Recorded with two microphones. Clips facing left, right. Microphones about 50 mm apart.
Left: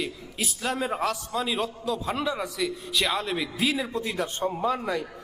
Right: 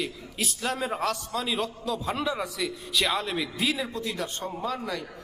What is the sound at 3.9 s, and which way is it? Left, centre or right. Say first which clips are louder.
Speech: left 3 dB; left.